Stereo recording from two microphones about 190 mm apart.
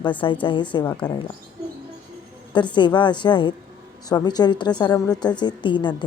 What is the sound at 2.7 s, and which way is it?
A woman's voice, 25° left (ahead or behind).